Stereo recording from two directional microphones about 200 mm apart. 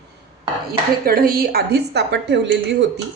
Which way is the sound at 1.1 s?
50° right (ahead or behind).